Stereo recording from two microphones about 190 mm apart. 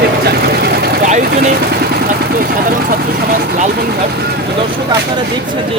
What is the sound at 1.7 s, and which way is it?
Speech, 50° right (ahead or behind).